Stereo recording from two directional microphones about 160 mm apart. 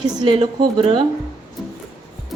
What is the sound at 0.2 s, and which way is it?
Speech, 30° right (ahead or behind).